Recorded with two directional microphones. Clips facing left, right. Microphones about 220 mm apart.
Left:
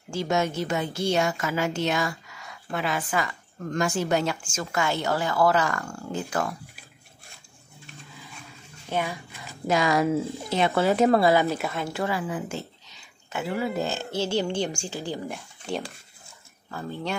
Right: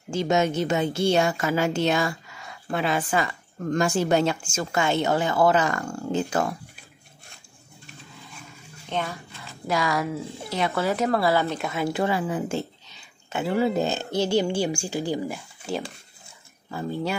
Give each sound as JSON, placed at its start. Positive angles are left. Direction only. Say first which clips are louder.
{"t": 0.1, "sound": "speech", "louder": "right 3 dB", "side_deg": -20}
{"t": 7.8, "sound": "vehicle", "louder": "even", "side_deg": 0}
{"t": 8.8, "sound": "a woman's voice", "louder": "left 1 dB", "side_deg": 15}
{"t": 11.4, "sound": "speech", "louder": "right 1 dB", "side_deg": 0}
{"t": 11.9, "sound": "speech", "louder": "right 5 dB", "side_deg": -25}
{"t": 15.2, "sound": "speech", "louder": "right 2 dB", "side_deg": 0}